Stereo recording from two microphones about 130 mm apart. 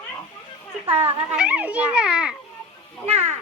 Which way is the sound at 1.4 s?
10° right (ahead or behind).